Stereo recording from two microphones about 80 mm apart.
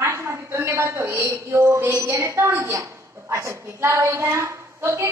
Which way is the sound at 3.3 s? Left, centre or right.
Right.